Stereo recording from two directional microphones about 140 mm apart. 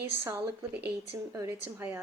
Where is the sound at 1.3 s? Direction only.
20° right (ahead or behind).